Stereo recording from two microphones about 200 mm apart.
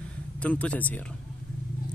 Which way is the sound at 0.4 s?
5° left (ahead or behind).